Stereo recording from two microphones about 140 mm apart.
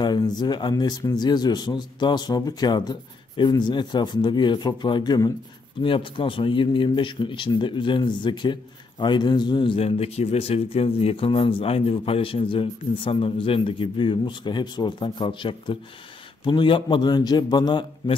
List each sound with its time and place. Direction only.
0.0 s speech: 30° left (ahead or behind)